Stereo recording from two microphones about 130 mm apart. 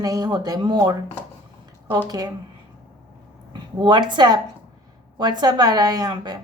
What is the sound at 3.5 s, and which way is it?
A woman's voice, 35° right (ahead or behind).